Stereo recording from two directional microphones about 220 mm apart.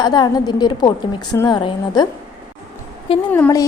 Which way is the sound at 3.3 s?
10° left (ahead or behind).